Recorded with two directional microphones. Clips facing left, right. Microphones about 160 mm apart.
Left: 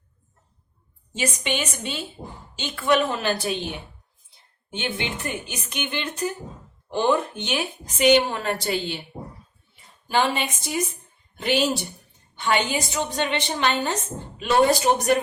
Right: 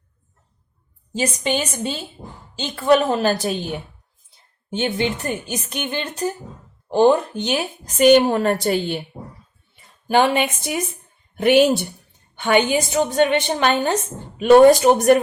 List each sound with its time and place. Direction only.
1.1 s a woman's voice: 35° right (ahead or behind)
10.1 s a woman's voice: 55° right (ahead or behind)